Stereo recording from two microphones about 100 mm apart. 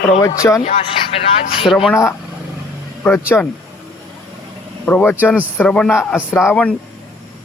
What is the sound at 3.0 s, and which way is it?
Speech, 15° left (ahead or behind).